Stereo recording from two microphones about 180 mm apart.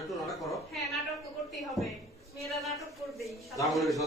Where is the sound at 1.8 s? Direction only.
Centre (ahead or behind).